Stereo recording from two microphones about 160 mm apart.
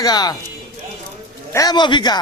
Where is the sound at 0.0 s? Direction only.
25° left (ahead or behind).